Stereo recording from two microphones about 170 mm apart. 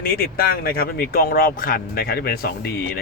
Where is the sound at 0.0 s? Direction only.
60° left (ahead or behind).